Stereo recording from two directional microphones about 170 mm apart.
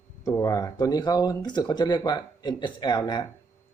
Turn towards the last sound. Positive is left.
turn(degrees=25)  # may be behind; listen again after turning